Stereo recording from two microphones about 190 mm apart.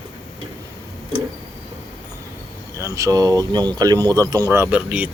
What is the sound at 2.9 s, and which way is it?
Speech, 20° right (ahead or behind).